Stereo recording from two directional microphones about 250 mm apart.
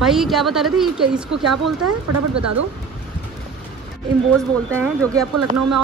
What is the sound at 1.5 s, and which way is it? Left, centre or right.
Speech, right.